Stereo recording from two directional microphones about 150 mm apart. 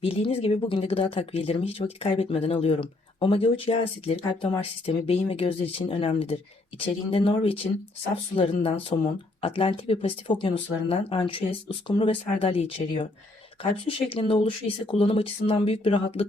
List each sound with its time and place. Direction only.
0.0 s speech: 40° left (ahead or behind)